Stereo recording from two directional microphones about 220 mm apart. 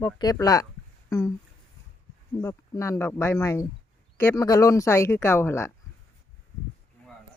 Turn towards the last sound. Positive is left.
turn(degrees=10)  # may be behind; listen again after turning